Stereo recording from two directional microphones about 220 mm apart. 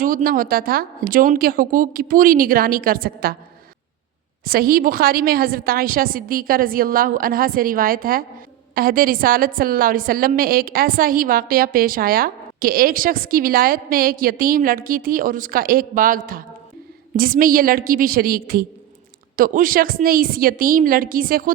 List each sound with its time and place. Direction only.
0.0 s a woman's voice: 40° right (ahead or behind)
4.4 s a woman's voice: 40° right (ahead or behind)